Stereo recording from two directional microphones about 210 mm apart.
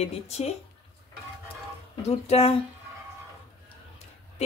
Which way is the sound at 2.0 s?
30° left (ahead or behind).